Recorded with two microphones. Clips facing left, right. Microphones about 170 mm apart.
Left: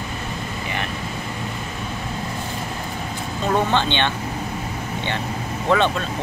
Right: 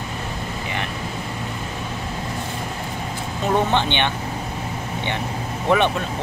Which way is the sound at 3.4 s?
15° right (ahead or behind).